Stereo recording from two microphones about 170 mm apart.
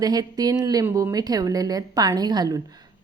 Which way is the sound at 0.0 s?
20° right (ahead or behind).